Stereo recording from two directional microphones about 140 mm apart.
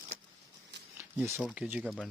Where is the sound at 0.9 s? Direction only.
15° right (ahead or behind).